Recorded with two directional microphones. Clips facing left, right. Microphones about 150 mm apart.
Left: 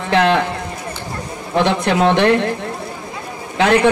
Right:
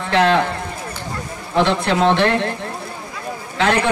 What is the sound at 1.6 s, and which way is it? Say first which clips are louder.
Speech: left 2 dB; 15° left (ahead or behind).